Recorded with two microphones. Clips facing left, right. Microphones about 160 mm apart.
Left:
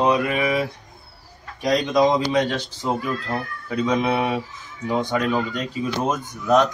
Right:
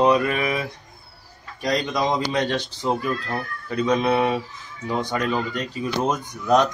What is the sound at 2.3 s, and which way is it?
A man's voice, 10° left (ahead or behind).